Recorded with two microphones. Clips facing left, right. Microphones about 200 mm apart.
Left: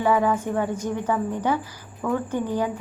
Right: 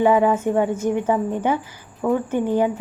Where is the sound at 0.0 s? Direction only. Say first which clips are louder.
Right 5 dB; 20° right (ahead or behind).